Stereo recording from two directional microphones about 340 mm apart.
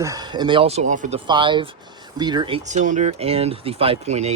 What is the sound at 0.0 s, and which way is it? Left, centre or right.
Speech, centre.